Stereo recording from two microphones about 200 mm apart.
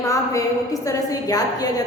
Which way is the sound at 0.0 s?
15° left (ahead or behind).